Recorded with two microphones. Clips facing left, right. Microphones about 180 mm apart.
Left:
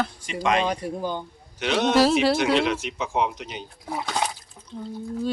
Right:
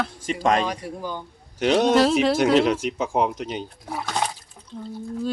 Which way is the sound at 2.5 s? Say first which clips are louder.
Right 4 dB; 40° right (ahead or behind).